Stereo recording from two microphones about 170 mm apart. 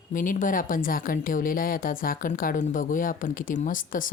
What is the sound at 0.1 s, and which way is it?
Speech, 50° left (ahead or behind).